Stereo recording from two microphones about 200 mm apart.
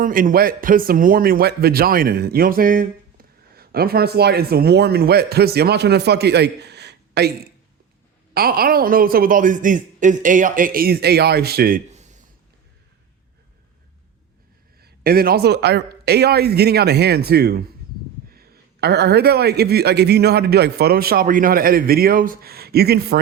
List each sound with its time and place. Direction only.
0.0 s a man's voice: 45° right (ahead or behind)
11.9 s a sound: 35° right (ahead or behind)
14.8 s a man's voice: 50° right (ahead or behind)